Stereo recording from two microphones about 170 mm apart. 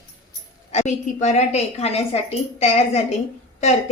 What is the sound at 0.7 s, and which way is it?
A woman's voice, 40° left (ahead or behind).